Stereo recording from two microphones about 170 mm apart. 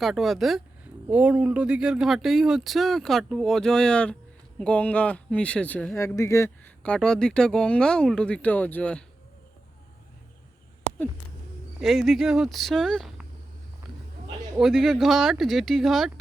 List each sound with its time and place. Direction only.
0.0 s speech: centre (ahead or behind); by 6.5 s 15° left (ahead or behind)
6.8 s speech: 5° left (ahead or behind)
11.8 s speech: centre (ahead or behind)
14.5 s speech: centre (ahead or behind)